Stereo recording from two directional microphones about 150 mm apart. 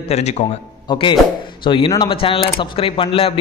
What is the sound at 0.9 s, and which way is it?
A man's voice, 30° left (ahead or behind).